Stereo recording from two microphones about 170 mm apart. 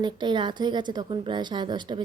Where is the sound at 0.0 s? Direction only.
25° right (ahead or behind).